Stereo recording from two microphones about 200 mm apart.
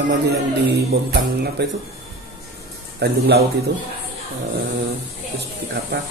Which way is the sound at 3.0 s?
55° right (ahead or behind).